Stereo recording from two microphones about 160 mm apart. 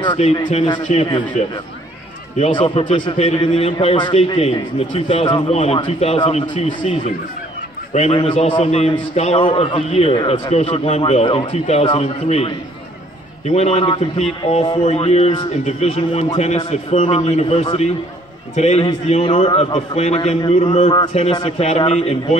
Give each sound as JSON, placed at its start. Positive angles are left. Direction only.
{"t": 0.9, "sound": "a man's voice", "side_deg": 45}
{"t": 2.5, "sound": "a man's voice", "side_deg": 30}
{"t": 6.4, "sound": "a man's voice", "side_deg": 50}
{"t": 7.9, "sound": "a man's voice", "side_deg": 40}
{"t": 21.5, "sound": "a man's voice", "side_deg": 40}